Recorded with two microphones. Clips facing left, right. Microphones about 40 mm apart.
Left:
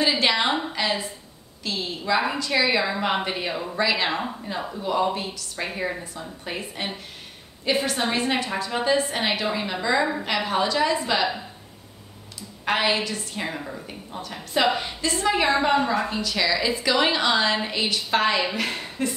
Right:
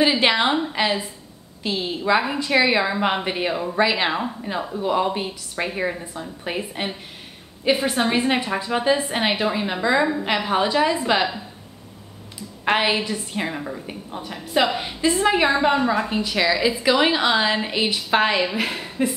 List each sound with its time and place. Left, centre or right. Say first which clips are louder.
0.0 s a woman's voice: right 3 dB; centre
12.6 s a woman's voice: right 3 dB; centre
16.1 s a woman's voice: right 3 dB; right